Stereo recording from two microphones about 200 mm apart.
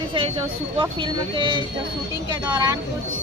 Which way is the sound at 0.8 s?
25° right (ahead or behind).